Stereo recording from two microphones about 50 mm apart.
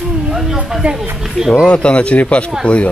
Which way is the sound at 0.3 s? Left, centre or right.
Centre.